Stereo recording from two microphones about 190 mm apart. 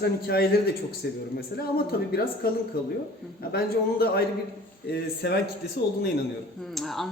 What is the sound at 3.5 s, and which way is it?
A man's voice, 55° left (ahead or behind).